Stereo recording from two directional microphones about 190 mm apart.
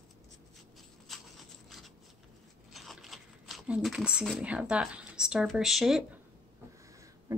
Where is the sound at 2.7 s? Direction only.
Centre (ahead or behind).